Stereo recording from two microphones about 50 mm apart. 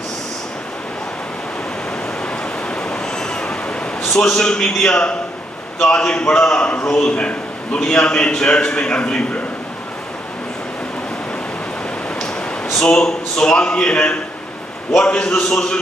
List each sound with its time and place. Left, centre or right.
2.7 s a sound: centre
4.0 s a man's voice: centre
12.7 s a man's voice: centre
15.2 s a man's voice: centre